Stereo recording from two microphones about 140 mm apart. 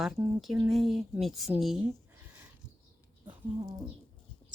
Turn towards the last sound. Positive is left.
turn(degrees=-25)  # may be behind; listen again after turning